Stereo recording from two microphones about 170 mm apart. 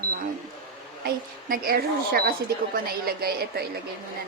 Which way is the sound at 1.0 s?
60° right (ahead or behind).